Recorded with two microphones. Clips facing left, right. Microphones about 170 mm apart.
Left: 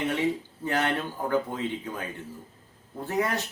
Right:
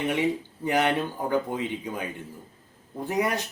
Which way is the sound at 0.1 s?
15° right (ahead or behind).